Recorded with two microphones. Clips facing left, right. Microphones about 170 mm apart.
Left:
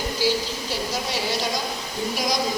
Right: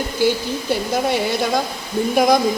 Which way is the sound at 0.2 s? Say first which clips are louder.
Right 6 dB; 55° right (ahead or behind).